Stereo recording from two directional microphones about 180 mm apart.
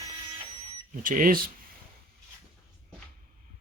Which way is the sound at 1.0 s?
50° right (ahead or behind).